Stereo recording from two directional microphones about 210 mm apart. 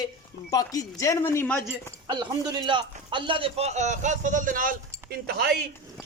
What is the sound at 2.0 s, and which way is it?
A man's voice, 20° right (ahead or behind).